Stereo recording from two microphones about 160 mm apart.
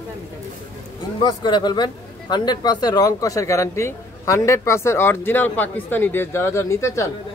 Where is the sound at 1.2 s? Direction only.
30° left (ahead or behind).